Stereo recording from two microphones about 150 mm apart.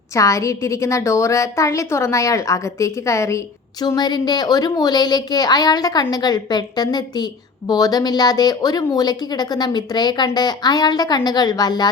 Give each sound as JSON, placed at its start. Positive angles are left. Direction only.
{"t": 0.1, "sound": "a woman's voice", "side_deg": 20}